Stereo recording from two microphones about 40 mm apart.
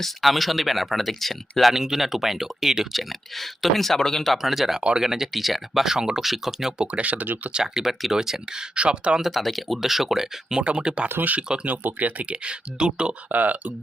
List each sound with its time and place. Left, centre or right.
0.0 s speech: centre
1.7 s speech: centre
4.4 s speech: centre
6.7 s speech: right
7.6 s speech: centre
8.7 s speech: right
9.2 s speech: centre
10.6 s speech: right
11.6 s speech: right
13.3 s speech: right